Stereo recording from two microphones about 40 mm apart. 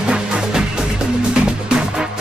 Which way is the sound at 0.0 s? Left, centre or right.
Right.